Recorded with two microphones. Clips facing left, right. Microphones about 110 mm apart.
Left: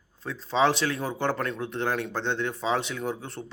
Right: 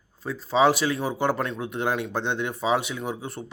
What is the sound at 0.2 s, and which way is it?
A man's voice, 5° right (ahead or behind).